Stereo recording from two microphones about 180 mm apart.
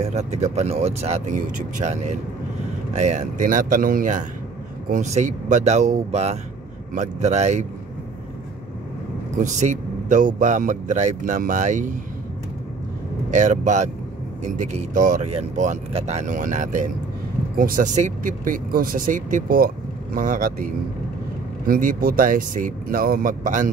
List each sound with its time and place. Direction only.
0.0 s speech: 40° right (ahead or behind)
9.4 s speech: 45° right (ahead or behind)
13.3 s speech: 45° right (ahead or behind)